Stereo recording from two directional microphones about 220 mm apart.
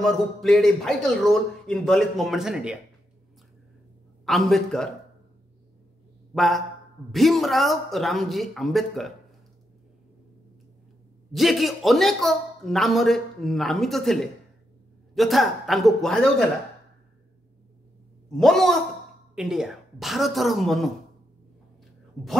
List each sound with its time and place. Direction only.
0.0 s a man's voice: centre (ahead or behind)
4.3 s a man's voice: centre (ahead or behind)
6.3 s a man's voice: centre (ahead or behind)
11.3 s a man's voice: centre (ahead or behind)
18.3 s a man's voice: centre (ahead or behind)